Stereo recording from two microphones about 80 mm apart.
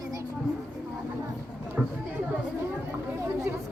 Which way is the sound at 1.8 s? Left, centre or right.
Centre.